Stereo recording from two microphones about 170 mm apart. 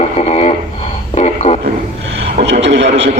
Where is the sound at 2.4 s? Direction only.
90° right.